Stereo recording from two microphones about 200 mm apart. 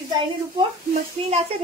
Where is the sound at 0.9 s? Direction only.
35° right (ahead or behind).